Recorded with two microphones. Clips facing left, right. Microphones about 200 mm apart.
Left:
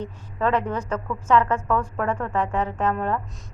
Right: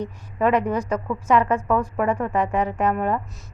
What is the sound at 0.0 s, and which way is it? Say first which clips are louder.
Speech: right 3 dB; 15° right (ahead or behind).